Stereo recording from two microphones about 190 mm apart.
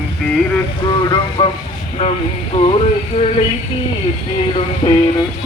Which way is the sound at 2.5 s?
35° left (ahead or behind).